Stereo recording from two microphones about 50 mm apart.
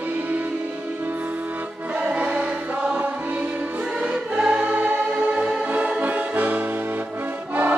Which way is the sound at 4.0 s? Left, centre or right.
Right.